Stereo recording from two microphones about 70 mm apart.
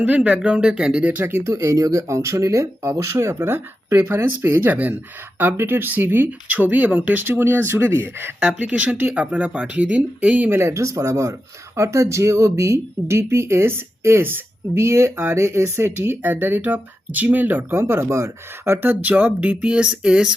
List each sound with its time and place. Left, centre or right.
0.0 s speech: centre
1.1 s speech: right
1.5 s speech: right
4.7 s speech: right
10.5 s speech: right; by 20.3 s centre